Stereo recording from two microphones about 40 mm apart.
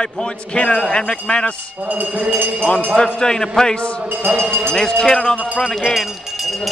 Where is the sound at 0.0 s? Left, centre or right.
Left.